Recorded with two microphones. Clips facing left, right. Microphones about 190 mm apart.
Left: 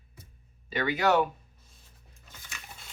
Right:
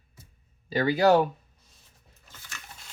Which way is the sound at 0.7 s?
35° right (ahead or behind).